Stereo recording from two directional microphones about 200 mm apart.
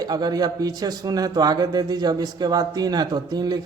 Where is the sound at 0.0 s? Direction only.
20° right (ahead or behind).